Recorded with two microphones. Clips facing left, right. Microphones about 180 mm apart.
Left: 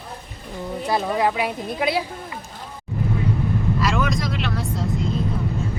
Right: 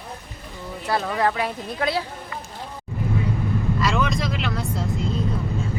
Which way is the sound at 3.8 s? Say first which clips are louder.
Even; 5° left (ahead or behind).